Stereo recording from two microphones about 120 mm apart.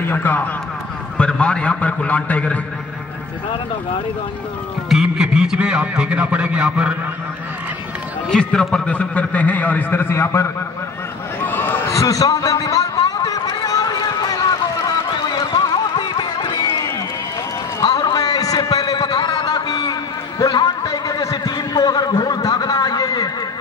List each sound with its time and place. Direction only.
0.0 s a man's voice: 15° left (ahead or behind)
4.8 s a man's voice: 5° right (ahead or behind)
8.3 s a man's voice: 5° left (ahead or behind); by 10.5 s 20° left (ahead or behind)
11.4 s a sound: 15° left (ahead or behind)
14.9 s run: 35° left (ahead or behind)
17.8 s a sound: 35° left (ahead or behind)